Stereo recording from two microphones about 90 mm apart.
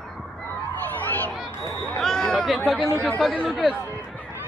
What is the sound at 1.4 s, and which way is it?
Speech, centre (ahead or behind).